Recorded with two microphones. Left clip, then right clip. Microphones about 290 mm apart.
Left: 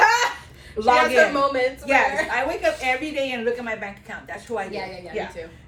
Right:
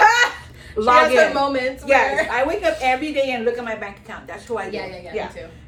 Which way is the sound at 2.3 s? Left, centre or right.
Centre.